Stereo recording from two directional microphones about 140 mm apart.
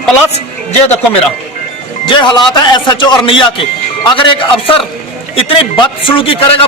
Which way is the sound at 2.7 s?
30° left (ahead or behind).